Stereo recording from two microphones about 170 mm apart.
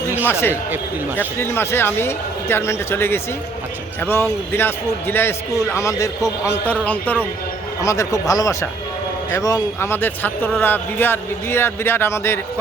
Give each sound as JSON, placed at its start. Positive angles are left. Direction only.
{"t": 0.3, "sound": "a man's voice", "side_deg": 15}